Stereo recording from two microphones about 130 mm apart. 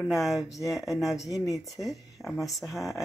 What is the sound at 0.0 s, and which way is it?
Speech, centre (ahead or behind).